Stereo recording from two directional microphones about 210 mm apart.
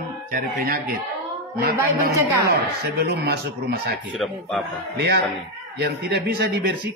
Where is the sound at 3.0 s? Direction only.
50° right (ahead or behind).